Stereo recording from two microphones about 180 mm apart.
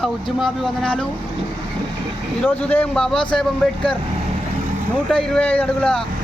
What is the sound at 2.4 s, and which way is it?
Speech, 5° left (ahead or behind).